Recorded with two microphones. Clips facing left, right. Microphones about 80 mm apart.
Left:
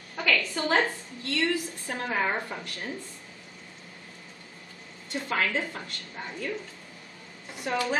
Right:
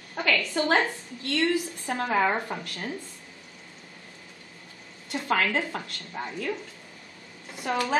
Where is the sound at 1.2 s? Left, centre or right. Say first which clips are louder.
Right 3 dB; right.